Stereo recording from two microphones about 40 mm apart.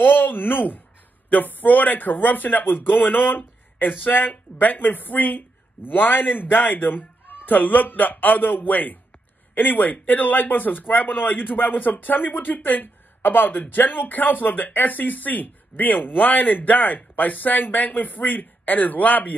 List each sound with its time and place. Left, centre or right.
0.0 s speech: left